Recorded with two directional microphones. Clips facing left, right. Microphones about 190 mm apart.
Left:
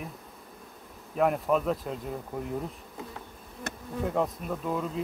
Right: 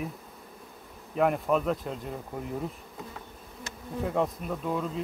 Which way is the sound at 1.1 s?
Centre (ahead or behind).